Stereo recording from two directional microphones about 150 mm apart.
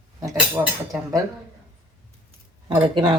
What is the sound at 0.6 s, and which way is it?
Speech, 20° right (ahead or behind).